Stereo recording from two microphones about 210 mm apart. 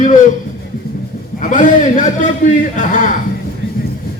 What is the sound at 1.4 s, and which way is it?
A man's voice, 35° left (ahead or behind).